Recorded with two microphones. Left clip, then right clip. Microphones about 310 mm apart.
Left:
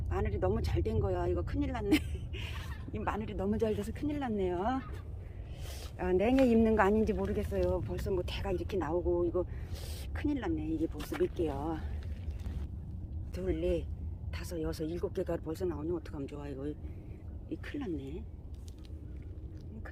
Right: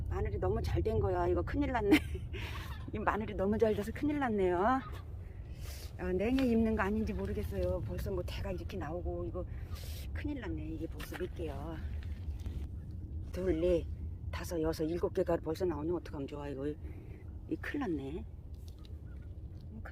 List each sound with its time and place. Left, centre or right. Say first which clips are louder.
0.1 s speech: left 3 dB; centre
6.0 s speech: left 5 dB; centre
10.9 s speech: left 5 dB; centre
11.2 s speech: left 9 dB; centre
13.3 s speech: right 2 dB; centre